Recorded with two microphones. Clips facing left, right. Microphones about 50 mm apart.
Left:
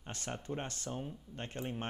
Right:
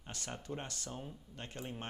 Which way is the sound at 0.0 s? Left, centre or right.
Left.